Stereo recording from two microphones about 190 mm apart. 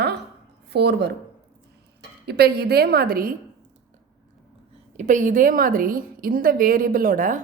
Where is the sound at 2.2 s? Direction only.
60° right (ahead or behind).